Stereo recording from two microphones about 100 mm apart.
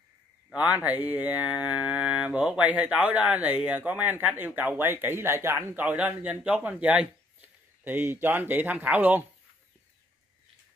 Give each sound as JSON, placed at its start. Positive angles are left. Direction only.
{"t": 0.5, "sound": "speech", "side_deg": -15}